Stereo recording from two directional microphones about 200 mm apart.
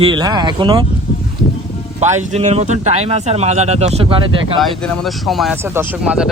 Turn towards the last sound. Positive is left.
turn(degrees=-5)  # may be behind; listen again after turning